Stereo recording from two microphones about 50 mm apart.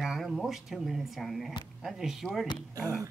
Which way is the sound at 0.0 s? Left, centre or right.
Centre.